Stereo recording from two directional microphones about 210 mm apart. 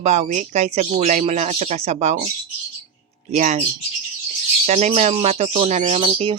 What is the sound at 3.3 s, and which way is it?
Speech, 35° right (ahead or behind).